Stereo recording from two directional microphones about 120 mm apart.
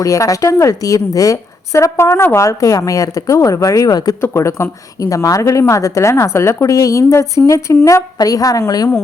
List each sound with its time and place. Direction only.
0.0 s a woman's voice: 30° left (ahead or behind)